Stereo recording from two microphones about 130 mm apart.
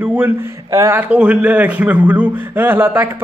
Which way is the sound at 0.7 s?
25° right (ahead or behind).